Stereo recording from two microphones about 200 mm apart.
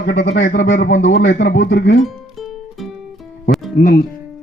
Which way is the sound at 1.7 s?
65° left (ahead or behind).